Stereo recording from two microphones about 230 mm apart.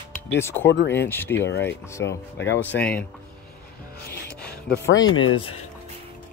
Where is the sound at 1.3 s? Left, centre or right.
Left.